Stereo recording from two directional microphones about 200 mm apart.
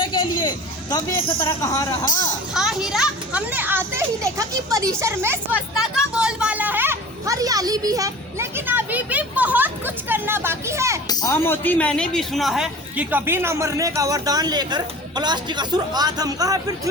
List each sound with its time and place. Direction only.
0.0 s speech: 25° left (ahead or behind)
2.5 s a man's voice: centre (ahead or behind)
11.1 s a man's voice: 15° left (ahead or behind); by 16.9 s 20° right (ahead or behind)